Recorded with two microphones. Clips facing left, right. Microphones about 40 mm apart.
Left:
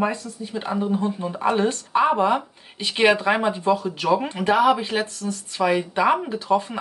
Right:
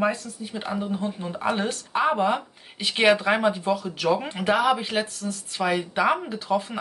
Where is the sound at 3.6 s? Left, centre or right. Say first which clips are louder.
Left 3 dB; centre.